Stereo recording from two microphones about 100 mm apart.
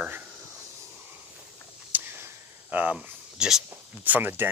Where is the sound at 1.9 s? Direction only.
20° right (ahead or behind).